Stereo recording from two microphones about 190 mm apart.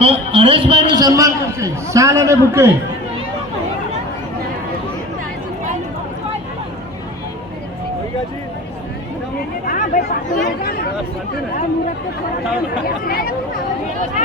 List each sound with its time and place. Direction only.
0.0 s a man's voice: 30° right (ahead or behind)
9.6 s a sound: 45° left (ahead or behind)
10.4 s speech: 55° left (ahead or behind)
12.8 s speech: 50° left (ahead or behind)